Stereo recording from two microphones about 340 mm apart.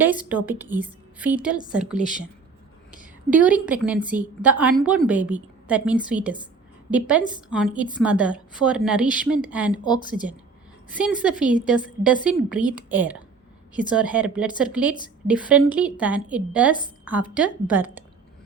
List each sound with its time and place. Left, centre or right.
0.0 s speech: centre
2.0 s speech: left
3.2 s speech: centre
9.8 s speech: centre
10.9 s speech: centre